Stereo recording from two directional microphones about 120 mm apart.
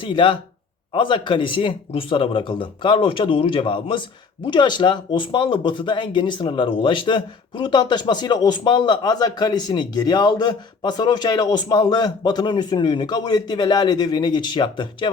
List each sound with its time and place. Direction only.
0.0 s speech: 40° left (ahead or behind)